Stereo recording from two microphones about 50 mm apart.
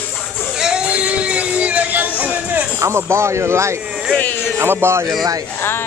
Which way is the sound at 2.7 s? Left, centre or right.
Right.